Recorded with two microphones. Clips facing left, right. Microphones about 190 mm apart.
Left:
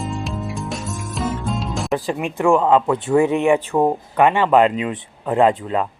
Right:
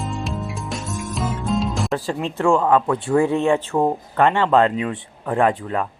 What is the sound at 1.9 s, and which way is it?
Speech, 15° left (ahead or behind).